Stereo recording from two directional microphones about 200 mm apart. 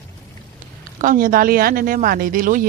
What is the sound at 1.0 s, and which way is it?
Speech, 45° right (ahead or behind).